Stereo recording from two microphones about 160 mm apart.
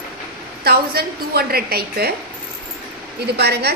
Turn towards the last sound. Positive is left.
turn(degrees=-90)